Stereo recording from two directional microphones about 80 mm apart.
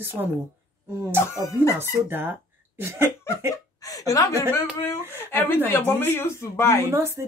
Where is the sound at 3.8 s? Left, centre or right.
Left.